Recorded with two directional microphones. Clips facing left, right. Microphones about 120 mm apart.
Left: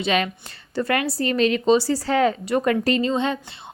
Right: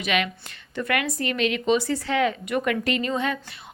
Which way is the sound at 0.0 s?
35° left (ahead or behind).